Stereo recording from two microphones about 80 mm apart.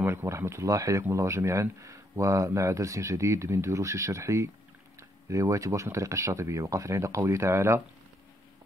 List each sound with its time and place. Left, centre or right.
0.0 s speech: right